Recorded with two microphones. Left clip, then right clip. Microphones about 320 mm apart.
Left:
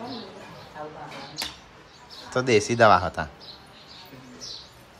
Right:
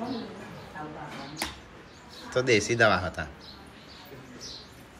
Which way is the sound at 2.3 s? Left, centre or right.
Centre.